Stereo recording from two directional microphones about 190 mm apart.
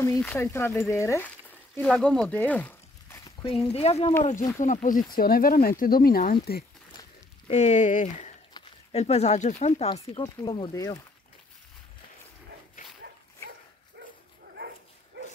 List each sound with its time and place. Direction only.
0.0 s speech: 10° left (ahead or behind)
3.4 s speech: 30° left (ahead or behind); by 6.6 s 55° left (ahead or behind)
7.4 s speech: 35° left (ahead or behind)
10.2 s speech: 20° left (ahead or behind)